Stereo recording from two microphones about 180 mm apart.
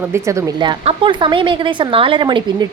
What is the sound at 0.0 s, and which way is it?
A woman's voice, 15° right (ahead or behind).